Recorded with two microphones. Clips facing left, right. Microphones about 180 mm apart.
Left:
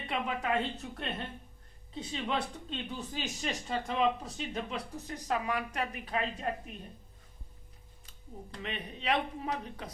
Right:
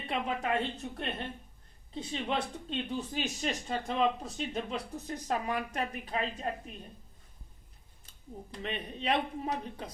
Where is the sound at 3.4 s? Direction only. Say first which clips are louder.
Right 1 dB; 30° right (ahead or behind).